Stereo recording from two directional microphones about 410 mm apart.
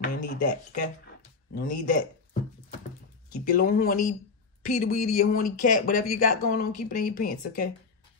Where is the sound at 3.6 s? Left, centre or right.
Left.